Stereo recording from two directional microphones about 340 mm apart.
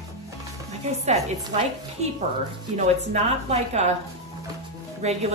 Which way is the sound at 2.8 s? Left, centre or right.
Centre.